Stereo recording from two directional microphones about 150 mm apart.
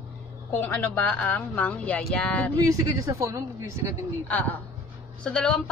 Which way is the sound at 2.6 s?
20° right (ahead or behind).